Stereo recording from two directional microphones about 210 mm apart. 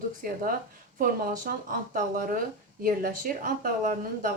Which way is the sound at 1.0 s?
45° right (ahead or behind).